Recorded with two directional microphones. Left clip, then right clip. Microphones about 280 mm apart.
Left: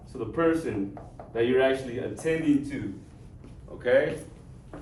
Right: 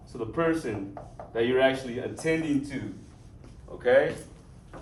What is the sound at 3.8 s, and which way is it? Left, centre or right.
Speech, right.